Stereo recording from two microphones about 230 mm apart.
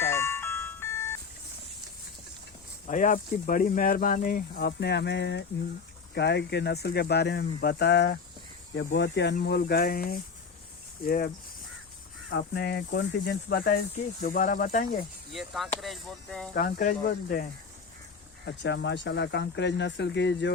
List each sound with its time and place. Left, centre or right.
0.0 s music: centre
2.8 s speech: left
12.3 s speech: left
15.3 s speech: centre
16.6 s speech: left
18.4 s speech: left